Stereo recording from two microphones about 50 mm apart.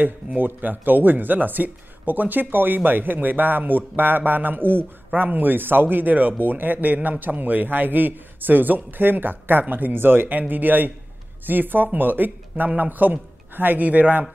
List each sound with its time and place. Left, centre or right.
0.0 s speech: right